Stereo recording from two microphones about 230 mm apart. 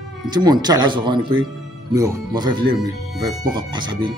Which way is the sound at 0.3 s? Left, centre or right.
Centre.